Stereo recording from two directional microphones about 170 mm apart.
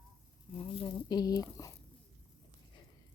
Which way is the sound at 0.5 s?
30° left (ahead or behind).